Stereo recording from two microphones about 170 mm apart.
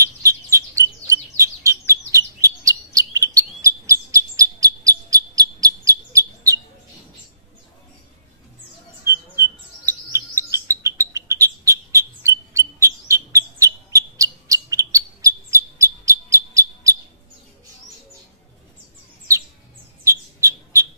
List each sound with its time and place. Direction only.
0.0 s bird: 20° right (ahead or behind)
9.0 s bird: 15° right (ahead or behind)
20.0 s bird: 15° right (ahead or behind)